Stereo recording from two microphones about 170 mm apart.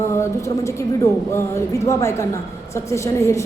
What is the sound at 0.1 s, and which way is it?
A woman's voice, 15° left (ahead or behind).